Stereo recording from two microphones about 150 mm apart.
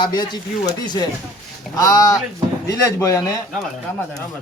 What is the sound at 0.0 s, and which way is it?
Speech, 30° left (ahead or behind).